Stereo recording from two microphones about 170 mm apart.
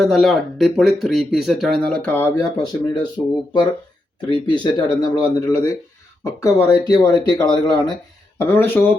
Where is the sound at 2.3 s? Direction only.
20° left (ahead or behind).